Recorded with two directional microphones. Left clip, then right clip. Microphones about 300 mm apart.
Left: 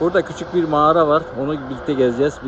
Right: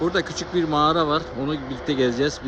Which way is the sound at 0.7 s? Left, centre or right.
Centre.